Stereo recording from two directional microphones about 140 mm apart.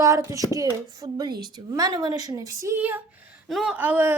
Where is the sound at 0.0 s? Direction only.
25° right (ahead or behind).